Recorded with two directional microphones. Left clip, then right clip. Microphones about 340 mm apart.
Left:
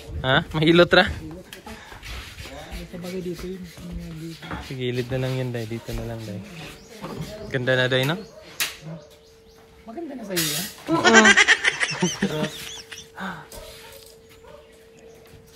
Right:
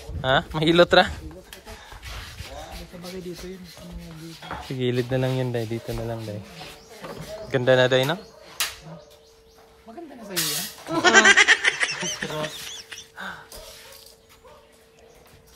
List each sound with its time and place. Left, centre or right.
0.2 s speech: centre
2.7 s a sound: right
4.4 s speech: right
7.4 s speech: centre
10.9 s goat: centre